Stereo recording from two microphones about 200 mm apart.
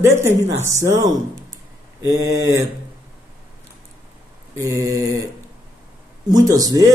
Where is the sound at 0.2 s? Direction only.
15° right (ahead or behind).